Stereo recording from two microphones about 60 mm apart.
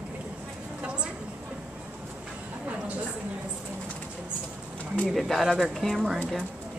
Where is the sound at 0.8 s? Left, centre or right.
Centre.